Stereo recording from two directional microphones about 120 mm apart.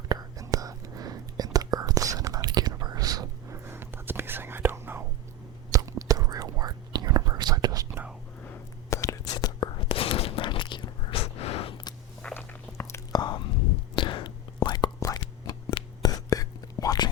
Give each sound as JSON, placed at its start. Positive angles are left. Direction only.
{"t": 0.1, "sound": "whispering", "side_deg": -30}
{"t": 3.6, "sound": "whispering", "side_deg": -20}
{"t": 7.9, "sound": "whispering", "side_deg": -15}
{"t": 8.9, "sound": "whispering", "side_deg": 25}
{"t": 9.9, "sound": "a sound", "side_deg": 50}
{"t": 12.2, "sound": "a sound", "side_deg": 10}
{"t": 12.7, "sound": "whispering", "side_deg": 15}
{"t": 13.1, "sound": "whispering", "side_deg": 35}